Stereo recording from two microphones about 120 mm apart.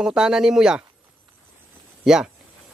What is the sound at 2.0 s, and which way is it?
Speech, 5° right (ahead or behind).